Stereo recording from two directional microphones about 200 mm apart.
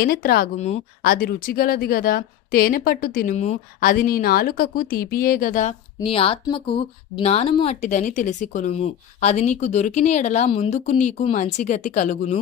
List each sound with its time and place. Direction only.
0.0 s speech: 50° left (ahead or behind)
0.6 s speech: 35° left (ahead or behind)
5.9 s speech: 30° left (ahead or behind)